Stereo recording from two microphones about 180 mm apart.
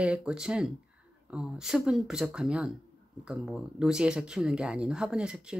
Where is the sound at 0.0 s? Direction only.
5° right (ahead or behind).